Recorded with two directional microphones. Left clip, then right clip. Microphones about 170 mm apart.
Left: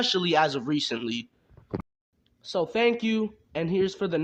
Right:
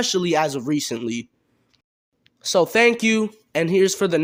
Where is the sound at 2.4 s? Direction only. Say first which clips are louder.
Right 8 dB; 50° right (ahead or behind).